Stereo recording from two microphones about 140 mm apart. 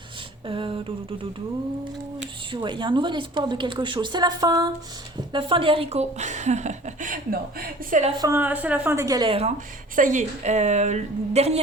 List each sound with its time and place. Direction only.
0.4 s a woman's voice: 40° right (ahead or behind)
2.5 s a woman's voice: 35° right (ahead or behind); by 8.0 s 80° right
8.4 s a woman's voice: 10° right (ahead or behind); by 9.3 s 25° right (ahead or behind)
9.9 s speech: 65° right (ahead or behind); by 11.6 s 50° right (ahead or behind)